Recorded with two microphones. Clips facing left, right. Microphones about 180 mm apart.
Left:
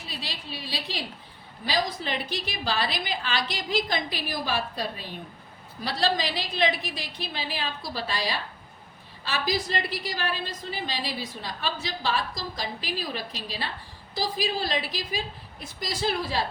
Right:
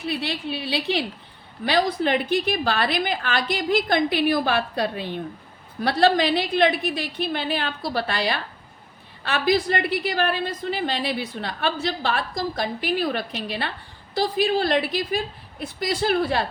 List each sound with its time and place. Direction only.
0.1 s a woman's voice: 60° right (ahead or behind)